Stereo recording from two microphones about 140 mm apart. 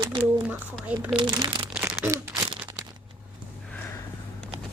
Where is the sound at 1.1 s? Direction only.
30° right (ahead or behind).